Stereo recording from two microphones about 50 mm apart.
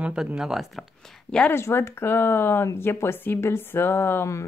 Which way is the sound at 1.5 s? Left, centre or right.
Left.